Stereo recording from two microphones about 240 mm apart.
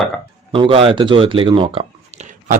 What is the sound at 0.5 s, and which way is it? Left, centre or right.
Speech, right.